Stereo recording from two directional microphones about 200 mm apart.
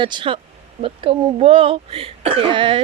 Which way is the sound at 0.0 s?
25° right (ahead or behind).